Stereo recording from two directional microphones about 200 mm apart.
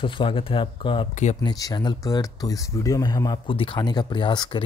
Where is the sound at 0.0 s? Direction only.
25° left (ahead or behind).